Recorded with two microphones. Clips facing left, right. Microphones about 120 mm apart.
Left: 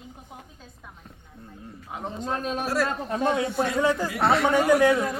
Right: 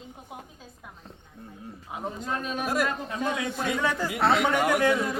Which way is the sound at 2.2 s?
35° left (ahead or behind).